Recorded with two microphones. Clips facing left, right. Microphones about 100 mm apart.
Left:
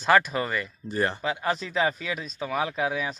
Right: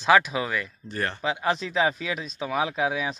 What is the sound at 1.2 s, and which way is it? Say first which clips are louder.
Speech: right 2 dB; 20° right (ahead or behind).